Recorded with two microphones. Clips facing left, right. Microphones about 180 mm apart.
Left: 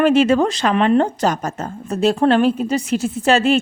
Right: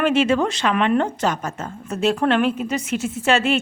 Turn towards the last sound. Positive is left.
turn(degrees=35)  # may be behind; listen again after turning